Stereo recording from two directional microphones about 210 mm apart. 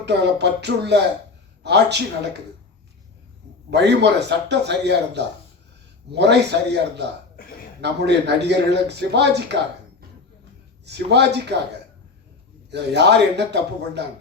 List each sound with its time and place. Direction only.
0.0 s speech: 55° right (ahead or behind)
3.7 s speech: 55° right (ahead or behind)
10.8 s speech: 55° right (ahead or behind)
12.7 s speech: 55° right (ahead or behind)